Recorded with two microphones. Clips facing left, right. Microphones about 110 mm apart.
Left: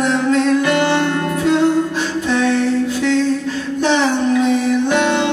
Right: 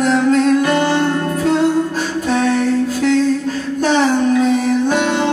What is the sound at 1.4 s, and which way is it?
Music, 40° right (ahead or behind).